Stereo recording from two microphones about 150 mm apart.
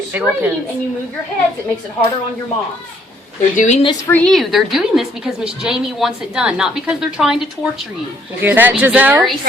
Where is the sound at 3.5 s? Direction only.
50° left (ahead or behind).